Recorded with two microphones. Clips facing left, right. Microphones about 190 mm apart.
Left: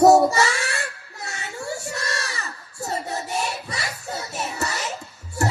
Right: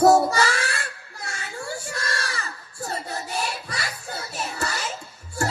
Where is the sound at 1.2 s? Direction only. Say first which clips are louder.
Left 2 dB; 25° left (ahead or behind).